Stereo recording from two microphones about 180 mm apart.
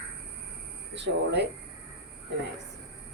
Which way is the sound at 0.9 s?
75° right (ahead or behind).